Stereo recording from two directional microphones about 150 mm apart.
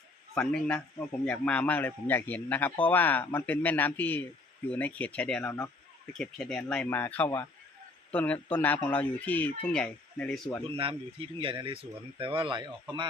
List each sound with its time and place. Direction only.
0.3 s a man's voice: 10° left (ahead or behind)
6.1 s a man's voice: 5° left (ahead or behind)
10.8 s speech: 35° right (ahead or behind)